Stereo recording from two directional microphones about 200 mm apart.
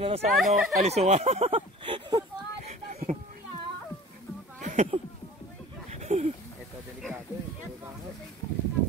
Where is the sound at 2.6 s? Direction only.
35° right (ahead or behind).